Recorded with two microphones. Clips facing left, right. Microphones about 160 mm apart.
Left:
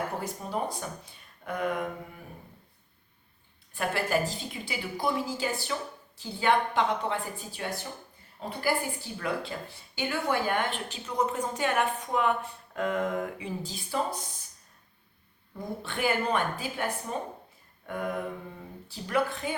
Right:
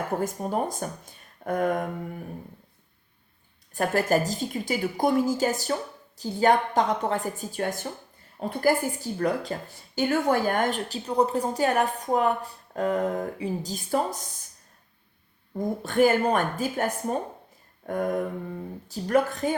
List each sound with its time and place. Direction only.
0.2 s a woman's voice: 50° right (ahead or behind)
3.8 s a woman's voice: 40° right (ahead or behind)
15.5 s a woman's voice: 45° right (ahead or behind)